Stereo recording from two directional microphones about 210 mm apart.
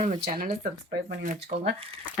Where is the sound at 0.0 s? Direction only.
35° right (ahead or behind).